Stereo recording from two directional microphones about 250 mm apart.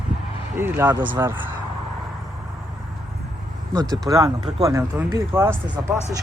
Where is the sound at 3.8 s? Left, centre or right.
Centre.